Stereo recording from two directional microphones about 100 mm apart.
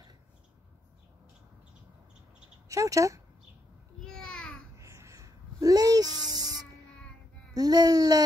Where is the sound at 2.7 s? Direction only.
35° right (ahead or behind).